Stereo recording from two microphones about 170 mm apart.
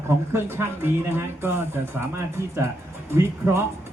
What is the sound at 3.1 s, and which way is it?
Speech, 15° right (ahead or behind).